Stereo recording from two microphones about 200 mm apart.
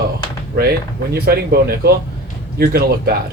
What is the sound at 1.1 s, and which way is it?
Speech, 50° right (ahead or behind).